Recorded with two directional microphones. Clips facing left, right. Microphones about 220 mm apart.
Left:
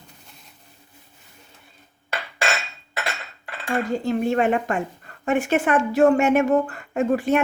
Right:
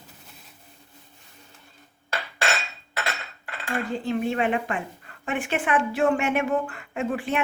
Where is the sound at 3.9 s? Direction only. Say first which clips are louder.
Left 4 dB; 45° left (ahead or behind).